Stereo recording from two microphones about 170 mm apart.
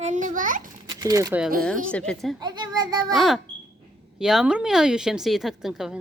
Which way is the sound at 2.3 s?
25° right (ahead or behind).